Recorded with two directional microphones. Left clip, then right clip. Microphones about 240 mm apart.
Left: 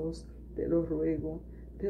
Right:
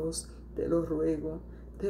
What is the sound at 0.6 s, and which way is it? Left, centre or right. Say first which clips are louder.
Speech: right 1 dB; centre.